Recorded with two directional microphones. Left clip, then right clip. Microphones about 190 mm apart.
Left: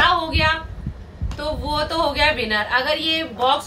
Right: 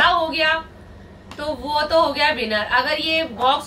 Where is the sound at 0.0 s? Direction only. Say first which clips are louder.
Right 1 dB; 15° left (ahead or behind).